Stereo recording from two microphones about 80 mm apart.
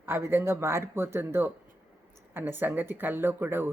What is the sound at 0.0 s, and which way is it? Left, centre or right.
Speech, right.